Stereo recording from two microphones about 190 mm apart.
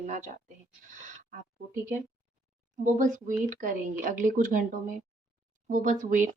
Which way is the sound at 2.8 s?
45° right (ahead or behind).